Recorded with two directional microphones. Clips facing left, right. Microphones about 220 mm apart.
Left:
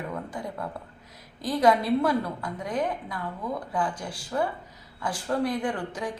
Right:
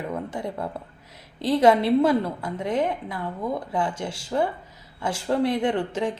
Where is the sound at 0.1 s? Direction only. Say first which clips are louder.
Right 4 dB; 25° right (ahead or behind).